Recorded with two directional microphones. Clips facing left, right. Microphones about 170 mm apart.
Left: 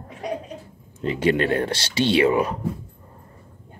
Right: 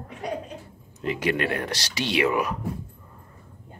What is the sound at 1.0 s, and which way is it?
Speech, 30° left (ahead or behind).